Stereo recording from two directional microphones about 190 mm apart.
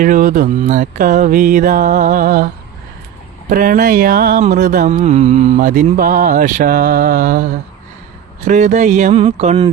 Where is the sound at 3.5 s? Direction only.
45° right (ahead or behind).